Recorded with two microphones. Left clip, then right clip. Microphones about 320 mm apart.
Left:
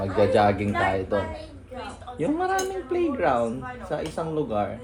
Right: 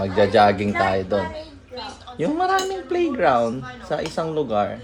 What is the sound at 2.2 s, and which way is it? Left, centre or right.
Speech, right.